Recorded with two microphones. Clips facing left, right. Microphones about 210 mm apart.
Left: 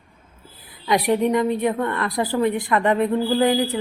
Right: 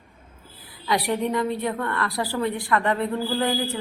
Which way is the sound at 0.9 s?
20° left (ahead or behind).